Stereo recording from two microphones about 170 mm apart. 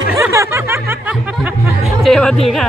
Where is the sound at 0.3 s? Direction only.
15° right (ahead or behind).